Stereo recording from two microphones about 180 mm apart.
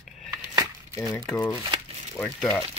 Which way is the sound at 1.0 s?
5° left (ahead or behind).